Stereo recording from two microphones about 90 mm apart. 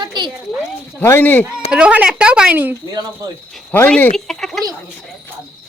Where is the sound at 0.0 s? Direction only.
55° right (ahead or behind).